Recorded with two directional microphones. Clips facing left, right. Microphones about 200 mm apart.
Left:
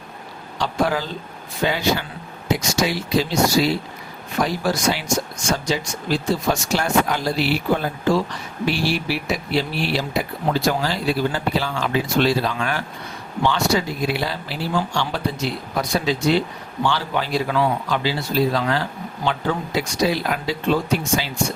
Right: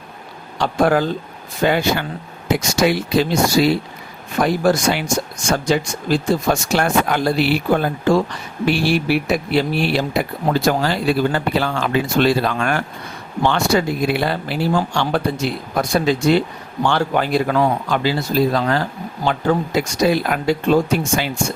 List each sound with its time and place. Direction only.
0.6 s speech: 55° right (ahead or behind)